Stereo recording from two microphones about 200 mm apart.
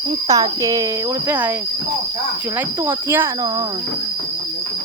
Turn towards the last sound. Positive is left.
turn(degrees=-10)  # may be behind; listen again after turning